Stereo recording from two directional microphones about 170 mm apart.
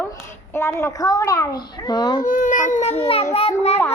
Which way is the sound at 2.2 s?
50° left (ahead or behind).